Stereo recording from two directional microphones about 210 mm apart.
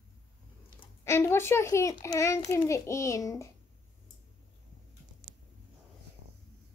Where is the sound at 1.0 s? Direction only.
15° left (ahead or behind).